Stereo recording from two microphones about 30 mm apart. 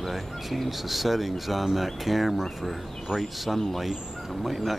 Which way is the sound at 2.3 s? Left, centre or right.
Centre.